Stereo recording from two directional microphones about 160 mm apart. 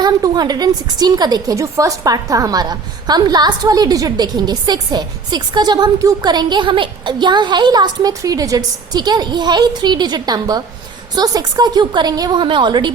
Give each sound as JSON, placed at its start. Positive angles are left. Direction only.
{"t": 0.0, "sound": "a woman's voice", "side_deg": -25}